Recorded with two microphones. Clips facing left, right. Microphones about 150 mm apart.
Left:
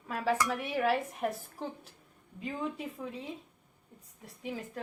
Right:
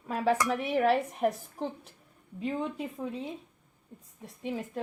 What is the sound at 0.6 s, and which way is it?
Speech, centre (ahead or behind).